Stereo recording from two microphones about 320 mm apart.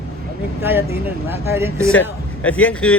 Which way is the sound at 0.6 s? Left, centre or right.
Centre.